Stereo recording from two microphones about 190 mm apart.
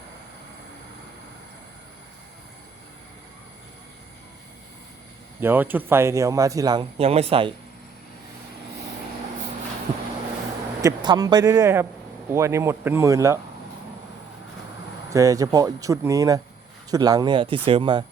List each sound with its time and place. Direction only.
5.4 s speech: 10° right (ahead or behind); by 7.5 s 30° right (ahead or behind)
10.8 s speech: 20° right (ahead or behind)
15.1 s speech: 20° right (ahead or behind)